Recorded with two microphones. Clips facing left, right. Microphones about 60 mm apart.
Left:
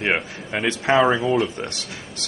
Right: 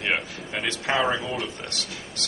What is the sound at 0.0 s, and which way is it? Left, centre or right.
Speech, left.